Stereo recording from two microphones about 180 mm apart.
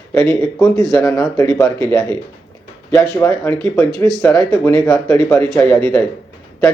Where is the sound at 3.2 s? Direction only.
15° left (ahead or behind).